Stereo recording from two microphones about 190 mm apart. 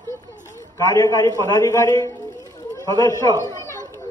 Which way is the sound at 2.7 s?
20° left (ahead or behind).